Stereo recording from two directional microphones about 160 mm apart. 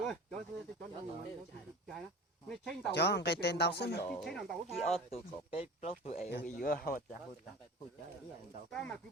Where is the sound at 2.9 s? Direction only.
90° left.